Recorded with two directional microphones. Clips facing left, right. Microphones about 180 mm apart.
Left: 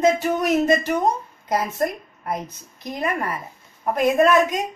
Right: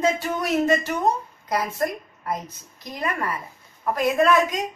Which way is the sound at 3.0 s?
25° left (ahead or behind).